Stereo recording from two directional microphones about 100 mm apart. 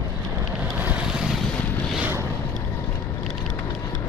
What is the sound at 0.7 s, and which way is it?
Boat, 15° right (ahead or behind).